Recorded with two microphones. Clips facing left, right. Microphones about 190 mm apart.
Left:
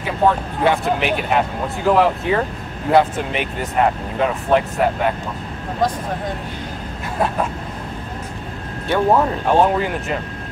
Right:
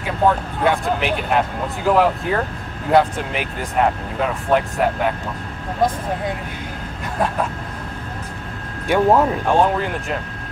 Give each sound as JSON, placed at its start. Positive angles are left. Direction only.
{"t": 0.7, "sound": "speech", "side_deg": 5}
{"t": 8.8, "sound": "speech", "side_deg": -10}
{"t": 9.5, "sound": "speech", "side_deg": 5}